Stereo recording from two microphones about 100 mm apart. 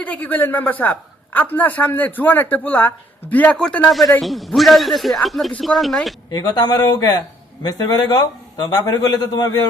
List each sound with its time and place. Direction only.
0.0 s a woman's voice: 15° left (ahead or behind)
6.3 s a man's voice: 40° left (ahead or behind)